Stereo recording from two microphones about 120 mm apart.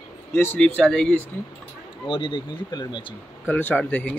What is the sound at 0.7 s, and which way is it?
Speech, 5° left (ahead or behind).